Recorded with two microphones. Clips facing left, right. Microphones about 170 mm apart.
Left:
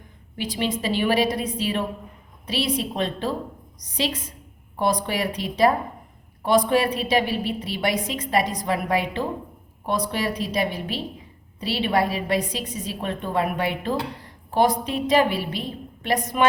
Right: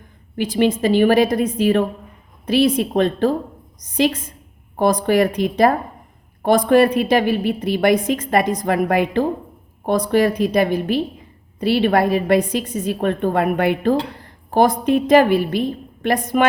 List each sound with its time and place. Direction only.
0.3 s a woman's voice: 50° right (ahead or behind)